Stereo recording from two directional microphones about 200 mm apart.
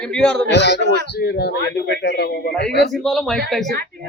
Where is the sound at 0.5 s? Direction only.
60° left (ahead or behind).